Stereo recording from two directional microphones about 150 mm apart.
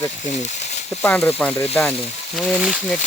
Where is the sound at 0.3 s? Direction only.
50° left (ahead or behind).